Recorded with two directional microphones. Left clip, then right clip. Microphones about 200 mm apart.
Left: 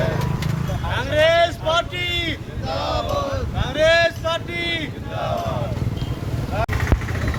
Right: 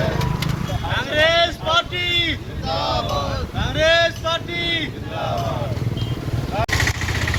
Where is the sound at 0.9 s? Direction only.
40° left (ahead or behind).